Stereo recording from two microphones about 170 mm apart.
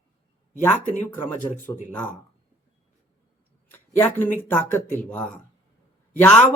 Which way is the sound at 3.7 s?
10° left (ahead or behind).